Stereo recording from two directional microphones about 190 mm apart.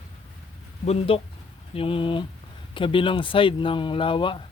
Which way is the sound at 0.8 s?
35° left (ahead or behind).